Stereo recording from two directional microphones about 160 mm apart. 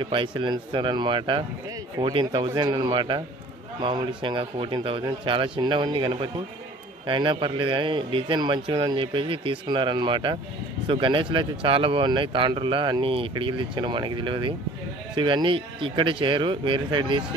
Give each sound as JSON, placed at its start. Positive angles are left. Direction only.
{"t": 0.0, "sound": "speech", "side_deg": -30}